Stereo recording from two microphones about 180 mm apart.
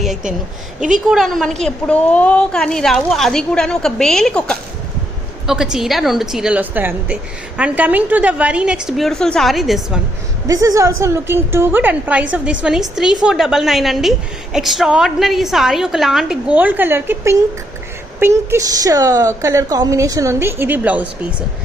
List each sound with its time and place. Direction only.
0.0 s a woman's voice: centre (ahead or behind)
5.7 s a woman's voice: centre (ahead or behind)
10.4 s a woman's voice: 20° right (ahead or behind)